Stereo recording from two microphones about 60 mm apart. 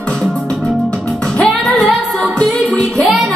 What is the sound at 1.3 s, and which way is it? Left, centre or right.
Music, centre.